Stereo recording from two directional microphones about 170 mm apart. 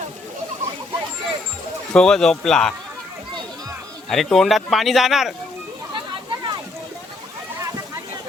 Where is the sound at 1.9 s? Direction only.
5° left (ahead or behind).